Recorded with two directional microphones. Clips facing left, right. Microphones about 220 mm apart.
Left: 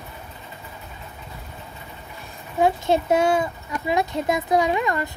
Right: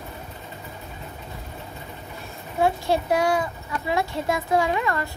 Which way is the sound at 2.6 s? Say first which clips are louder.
Left 2 dB; 20° left (ahead or behind).